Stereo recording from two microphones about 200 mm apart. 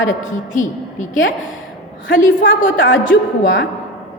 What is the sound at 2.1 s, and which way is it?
Speech, 70° left (ahead or behind).